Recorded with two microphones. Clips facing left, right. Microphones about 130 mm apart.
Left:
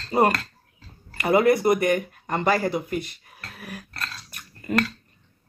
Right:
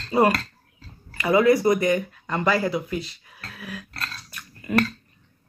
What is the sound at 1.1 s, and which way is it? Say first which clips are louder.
Speech: right 1 dB; 55° left (ahead or behind).